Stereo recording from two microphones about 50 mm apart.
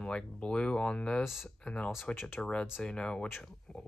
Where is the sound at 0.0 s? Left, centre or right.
Centre.